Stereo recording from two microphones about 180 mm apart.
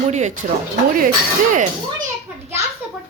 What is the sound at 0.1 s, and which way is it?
Speech, 40° right (ahead or behind).